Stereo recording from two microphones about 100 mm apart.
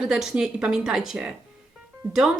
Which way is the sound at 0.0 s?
5° right (ahead or behind).